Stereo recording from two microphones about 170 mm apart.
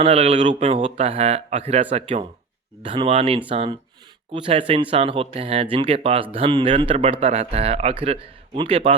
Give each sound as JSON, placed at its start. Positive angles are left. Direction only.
{"t": 0.0, "sound": "speech", "side_deg": -35}